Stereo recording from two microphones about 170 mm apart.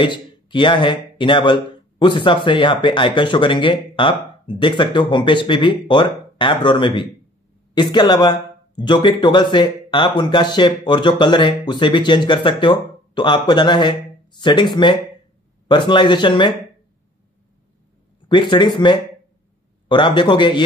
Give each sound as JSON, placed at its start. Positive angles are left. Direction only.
{"t": 0.0, "sound": "speech", "side_deg": 30}
{"t": 18.3, "sound": "speech", "side_deg": 25}